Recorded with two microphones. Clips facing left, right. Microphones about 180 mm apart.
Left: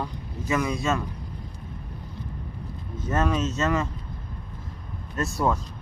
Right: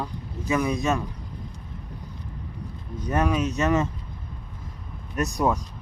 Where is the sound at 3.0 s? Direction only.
15° right (ahead or behind).